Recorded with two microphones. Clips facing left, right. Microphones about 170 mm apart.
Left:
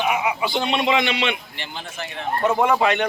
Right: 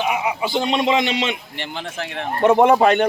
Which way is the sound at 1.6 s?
65° right (ahead or behind).